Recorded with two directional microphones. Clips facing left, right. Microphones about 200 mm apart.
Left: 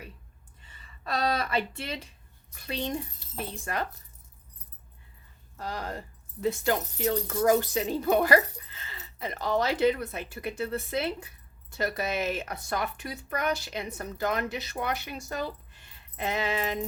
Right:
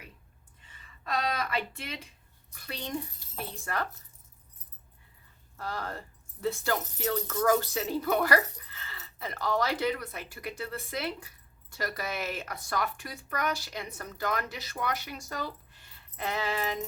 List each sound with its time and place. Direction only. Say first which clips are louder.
1.0 s speech: left 3 dB; 35° left (ahead or behind); by 3.8 s 20° left (ahead or behind)
5.5 s speech: left 2 dB; 15° left (ahead or behind)